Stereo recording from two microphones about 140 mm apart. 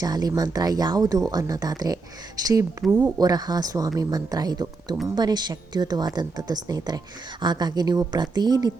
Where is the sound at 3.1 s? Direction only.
25° right (ahead or behind).